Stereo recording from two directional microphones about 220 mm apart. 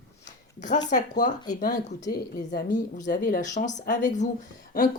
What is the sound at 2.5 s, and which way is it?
Speech, 35° left (ahead or behind).